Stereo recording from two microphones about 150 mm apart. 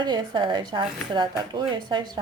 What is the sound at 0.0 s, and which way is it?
A woman's voice, 30° right (ahead or behind).